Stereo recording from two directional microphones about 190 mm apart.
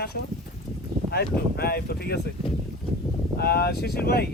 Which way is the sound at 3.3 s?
55° left (ahead or behind).